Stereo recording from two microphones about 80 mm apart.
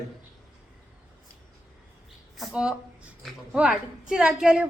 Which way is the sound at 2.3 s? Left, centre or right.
Centre.